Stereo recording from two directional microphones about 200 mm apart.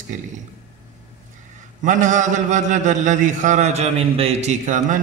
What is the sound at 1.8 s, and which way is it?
Mantra, 40° right (ahead or behind).